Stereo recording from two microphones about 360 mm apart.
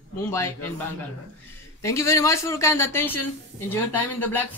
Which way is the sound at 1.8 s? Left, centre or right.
Centre.